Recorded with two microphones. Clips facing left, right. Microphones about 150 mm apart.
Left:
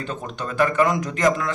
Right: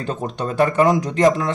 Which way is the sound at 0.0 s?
35° right (ahead or behind).